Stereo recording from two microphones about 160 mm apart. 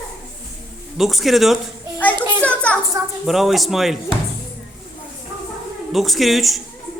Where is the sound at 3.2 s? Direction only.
Centre (ahead or behind).